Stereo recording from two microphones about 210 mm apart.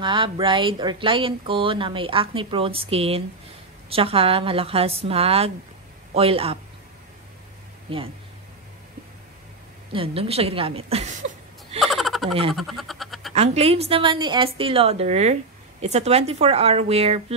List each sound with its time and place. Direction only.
0.0 s speech: 25° right (ahead or behind)
7.9 s speech: 25° right (ahead or behind)
9.9 s speech: 25° right (ahead or behind)
11.8 s a sound: centre (ahead or behind)
13.3 s speech: 30° right (ahead or behind)